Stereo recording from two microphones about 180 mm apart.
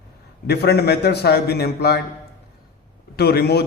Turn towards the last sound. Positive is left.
turn(degrees=65)  # may be behind; listen again after turning